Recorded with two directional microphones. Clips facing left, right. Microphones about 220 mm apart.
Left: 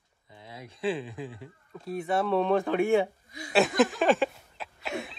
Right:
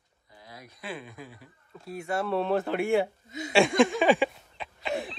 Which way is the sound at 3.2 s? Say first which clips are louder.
Right 6 dB; 20° right (ahead or behind).